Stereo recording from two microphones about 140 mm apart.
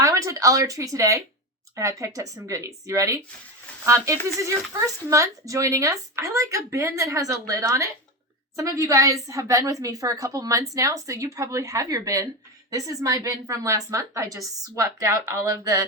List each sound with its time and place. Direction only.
0.0 s a woman's voice: 20° right (ahead or behind)